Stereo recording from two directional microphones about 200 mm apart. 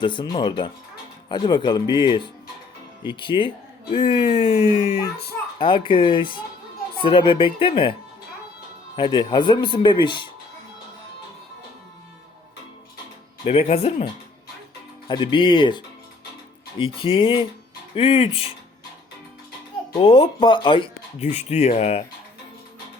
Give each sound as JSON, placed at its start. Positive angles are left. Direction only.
{"t": 0.0, "sound": "speech", "side_deg": 25}
{"t": 9.0, "sound": "speech", "side_deg": 25}
{"t": 13.4, "sound": "speech", "side_deg": 30}
{"t": 15.0, "sound": "speech", "side_deg": 25}
{"t": 19.9, "sound": "speech", "side_deg": 25}